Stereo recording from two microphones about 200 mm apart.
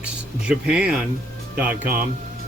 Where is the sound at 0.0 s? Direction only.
5° right (ahead or behind).